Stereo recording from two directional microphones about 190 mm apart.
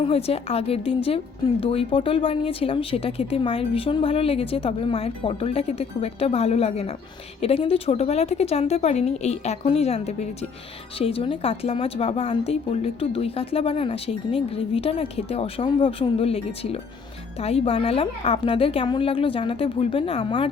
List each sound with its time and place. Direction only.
0.0 s a woman's voice: 30° left (ahead or behind)